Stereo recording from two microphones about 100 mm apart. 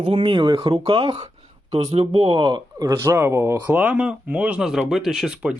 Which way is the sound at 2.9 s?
25° right (ahead or behind).